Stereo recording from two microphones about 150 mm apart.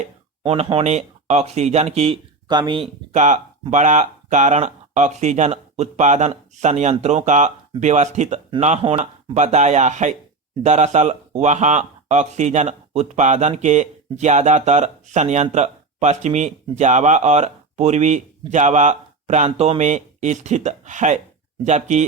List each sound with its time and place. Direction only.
0.4 s speech: 40° right (ahead or behind)
2.5 s speech: 30° right (ahead or behind)
3.1 s speech: 55° right (ahead or behind)
8.8 s speech: 30° right (ahead or behind)
9.3 s speech: 50° right (ahead or behind)
19.5 s speech: 40° right (ahead or behind)